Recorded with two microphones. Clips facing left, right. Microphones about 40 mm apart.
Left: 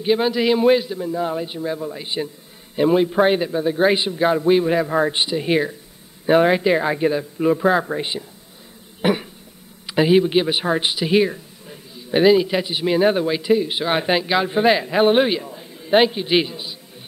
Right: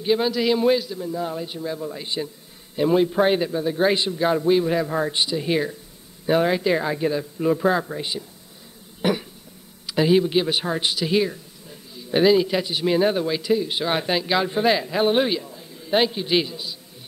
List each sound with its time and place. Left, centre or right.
0.0 s a man's voice: centre
7.8 s a man's voice: left
9.0 s cough: left
9.8 s a man's voice: left